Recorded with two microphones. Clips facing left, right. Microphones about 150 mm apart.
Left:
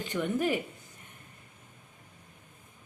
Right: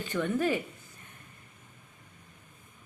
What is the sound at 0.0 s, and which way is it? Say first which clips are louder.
Speech: right 1 dB; 15° left (ahead or behind).